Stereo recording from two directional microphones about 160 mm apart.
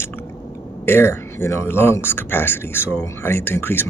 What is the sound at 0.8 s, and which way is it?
Speech, 15° left (ahead or behind).